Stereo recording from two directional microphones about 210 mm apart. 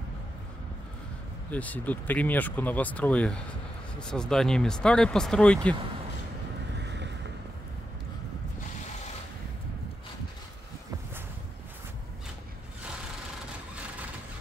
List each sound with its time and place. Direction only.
1.5 s speech: 5° left (ahead or behind)
6.8 s boat: 55° right (ahead or behind)